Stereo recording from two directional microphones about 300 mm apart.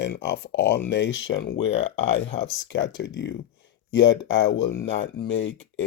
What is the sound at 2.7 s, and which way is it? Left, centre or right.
Speech, left.